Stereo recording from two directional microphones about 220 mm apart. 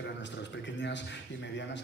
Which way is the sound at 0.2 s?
55° left (ahead or behind).